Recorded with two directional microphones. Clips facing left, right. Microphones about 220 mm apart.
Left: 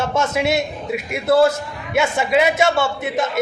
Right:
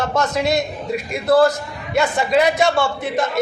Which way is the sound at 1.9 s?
5° left (ahead or behind).